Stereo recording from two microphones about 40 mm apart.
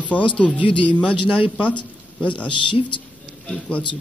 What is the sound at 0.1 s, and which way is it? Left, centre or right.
Speech, left.